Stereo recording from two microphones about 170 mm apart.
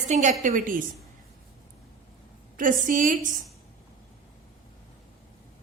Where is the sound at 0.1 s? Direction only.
45° right (ahead or behind).